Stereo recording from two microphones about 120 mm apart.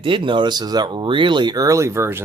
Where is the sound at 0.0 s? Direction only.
45° right (ahead or behind).